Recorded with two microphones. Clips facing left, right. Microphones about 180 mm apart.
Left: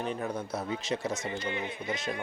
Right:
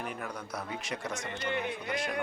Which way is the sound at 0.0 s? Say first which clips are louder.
Left 5 dB; 25° left (ahead or behind).